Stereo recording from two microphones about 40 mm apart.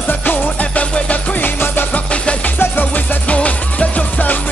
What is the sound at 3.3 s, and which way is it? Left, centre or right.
Music, left.